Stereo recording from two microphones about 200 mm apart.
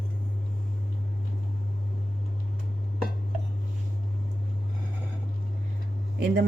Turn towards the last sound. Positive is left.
turn(degrees=-55)  # may be behind; listen again after turning